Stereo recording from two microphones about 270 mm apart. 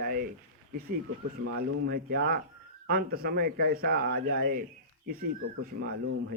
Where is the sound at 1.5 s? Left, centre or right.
Right.